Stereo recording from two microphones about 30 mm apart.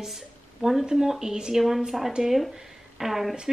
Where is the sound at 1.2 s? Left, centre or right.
Right.